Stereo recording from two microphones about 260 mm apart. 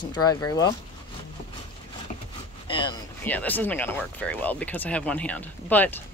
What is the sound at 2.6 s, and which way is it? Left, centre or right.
Speech, centre.